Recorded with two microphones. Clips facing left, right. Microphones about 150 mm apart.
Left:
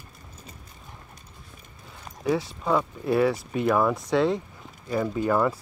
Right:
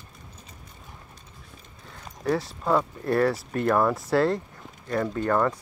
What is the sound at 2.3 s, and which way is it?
Speech, centre (ahead or behind).